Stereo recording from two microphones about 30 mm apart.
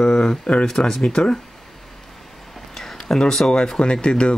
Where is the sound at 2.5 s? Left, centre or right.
Centre.